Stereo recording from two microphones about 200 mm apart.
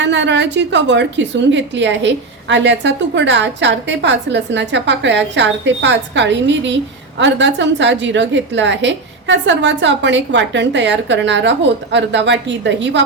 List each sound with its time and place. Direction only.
0.0 s a woman's voice: 60° right (ahead or behind)